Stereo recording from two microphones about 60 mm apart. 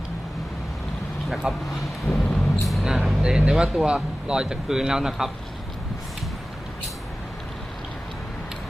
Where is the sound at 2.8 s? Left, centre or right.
Centre.